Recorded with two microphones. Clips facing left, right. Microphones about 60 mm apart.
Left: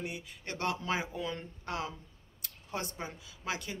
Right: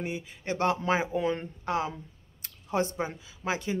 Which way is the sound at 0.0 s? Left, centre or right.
Right.